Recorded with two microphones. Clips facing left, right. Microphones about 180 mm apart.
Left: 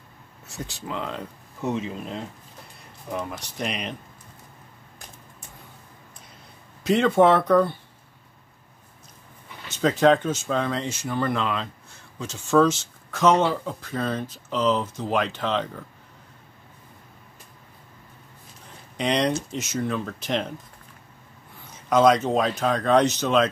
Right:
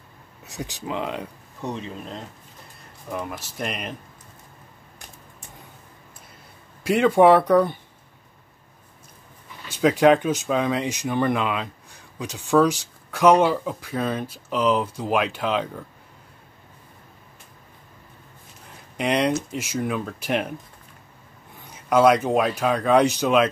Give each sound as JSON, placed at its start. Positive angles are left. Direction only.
{"t": 0.5, "sound": "speech", "side_deg": -15}
{"t": 1.6, "sound": "speech", "side_deg": 5}
{"t": 6.8, "sound": "speech", "side_deg": -10}
{"t": 9.7, "sound": "speech", "side_deg": -10}
{"t": 18.9, "sound": "speech", "side_deg": -10}
{"t": 21.7, "sound": "speech", "side_deg": -10}